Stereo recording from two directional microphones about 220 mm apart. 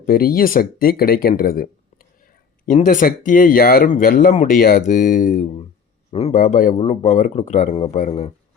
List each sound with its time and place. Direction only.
0.0 s speech: 40° left (ahead or behind)
2.6 s speech: 35° left (ahead or behind)